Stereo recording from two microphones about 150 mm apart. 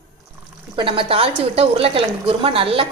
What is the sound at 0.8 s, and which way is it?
A woman's voice, 35° right (ahead or behind).